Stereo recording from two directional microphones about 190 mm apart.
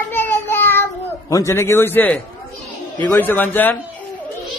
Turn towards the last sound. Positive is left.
turn(degrees=10)  # may be behind; listen again after turning